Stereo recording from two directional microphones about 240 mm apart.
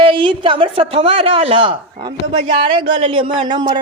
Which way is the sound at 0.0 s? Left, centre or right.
Right.